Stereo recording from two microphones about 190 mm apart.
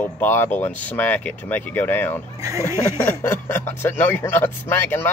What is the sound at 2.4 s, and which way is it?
Speech, 15° right (ahead or behind).